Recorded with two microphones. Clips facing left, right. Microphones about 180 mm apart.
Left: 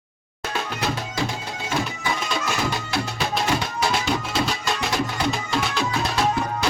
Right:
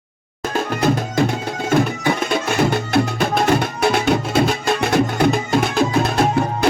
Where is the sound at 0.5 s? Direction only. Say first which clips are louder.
Right 8 dB; 50° right (ahead or behind).